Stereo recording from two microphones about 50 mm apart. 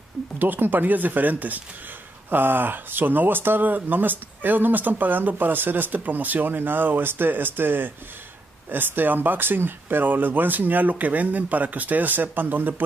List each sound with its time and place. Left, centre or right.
0.4 s speech: right